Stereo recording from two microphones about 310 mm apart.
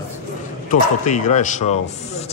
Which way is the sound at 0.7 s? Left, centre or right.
Left.